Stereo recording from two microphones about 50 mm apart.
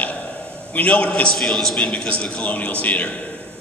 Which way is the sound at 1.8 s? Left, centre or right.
Centre.